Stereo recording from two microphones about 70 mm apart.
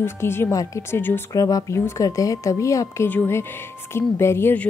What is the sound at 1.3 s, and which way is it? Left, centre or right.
A woman's voice, left.